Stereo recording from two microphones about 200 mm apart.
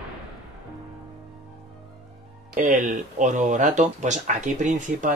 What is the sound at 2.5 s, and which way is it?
Speech, 40° right (ahead or behind).